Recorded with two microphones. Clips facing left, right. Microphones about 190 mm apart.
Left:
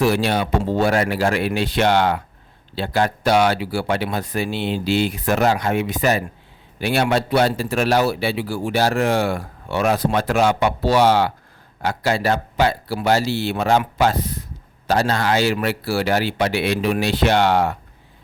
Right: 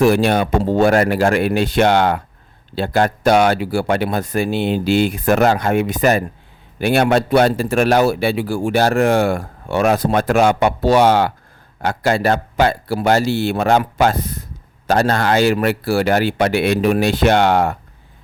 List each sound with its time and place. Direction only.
0.0 s a man's voice: 50° right (ahead or behind)